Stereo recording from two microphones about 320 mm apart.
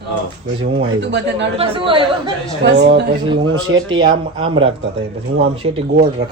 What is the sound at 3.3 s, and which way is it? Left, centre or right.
Speech, centre.